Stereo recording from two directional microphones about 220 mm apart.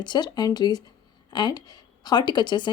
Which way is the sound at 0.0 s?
20° left (ahead or behind).